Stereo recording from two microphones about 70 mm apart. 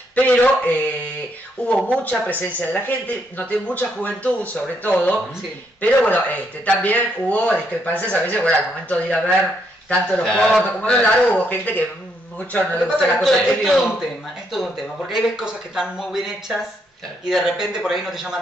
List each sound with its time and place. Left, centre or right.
0.1 s a man's voice: left
1.9 s a man's voice: centre
13.2 s a man's voice: centre